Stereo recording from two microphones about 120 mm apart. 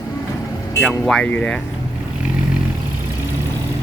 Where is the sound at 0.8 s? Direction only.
5° left (ahead or behind).